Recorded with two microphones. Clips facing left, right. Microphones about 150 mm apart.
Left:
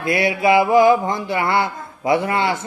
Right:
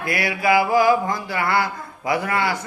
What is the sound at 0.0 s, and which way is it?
Speech, 25° left (ahead or behind).